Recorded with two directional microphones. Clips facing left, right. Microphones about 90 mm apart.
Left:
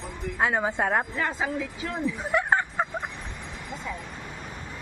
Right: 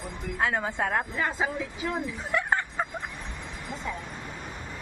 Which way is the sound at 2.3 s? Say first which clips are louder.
Left 2 dB; 20° left (ahead or behind).